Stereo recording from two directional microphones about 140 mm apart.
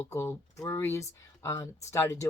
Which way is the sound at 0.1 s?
20° left (ahead or behind).